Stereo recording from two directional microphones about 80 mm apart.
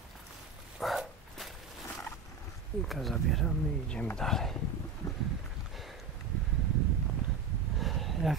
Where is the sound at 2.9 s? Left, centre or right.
Centre.